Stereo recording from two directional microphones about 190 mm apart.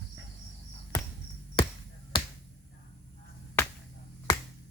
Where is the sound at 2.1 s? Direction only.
25° left (ahead or behind).